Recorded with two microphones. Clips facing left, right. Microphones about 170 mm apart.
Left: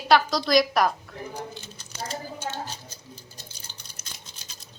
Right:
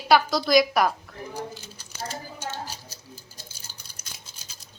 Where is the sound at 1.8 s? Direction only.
10° right (ahead or behind).